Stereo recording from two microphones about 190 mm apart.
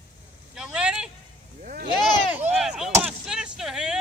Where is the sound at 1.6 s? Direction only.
50° right (ahead or behind).